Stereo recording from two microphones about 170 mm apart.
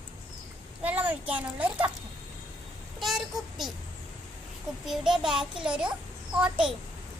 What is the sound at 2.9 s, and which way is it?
Speech, centre (ahead or behind).